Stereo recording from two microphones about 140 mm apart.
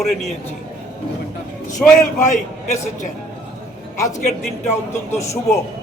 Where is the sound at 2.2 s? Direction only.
60° left (ahead or behind).